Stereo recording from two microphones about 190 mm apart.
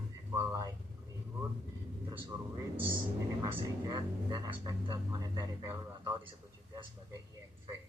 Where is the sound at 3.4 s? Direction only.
25° right (ahead or behind).